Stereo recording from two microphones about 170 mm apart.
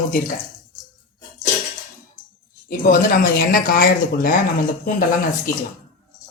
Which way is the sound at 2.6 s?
55° left (ahead or behind).